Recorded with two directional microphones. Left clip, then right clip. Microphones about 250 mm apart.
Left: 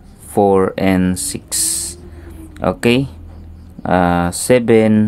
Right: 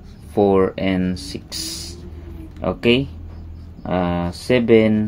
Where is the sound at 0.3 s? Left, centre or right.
Left.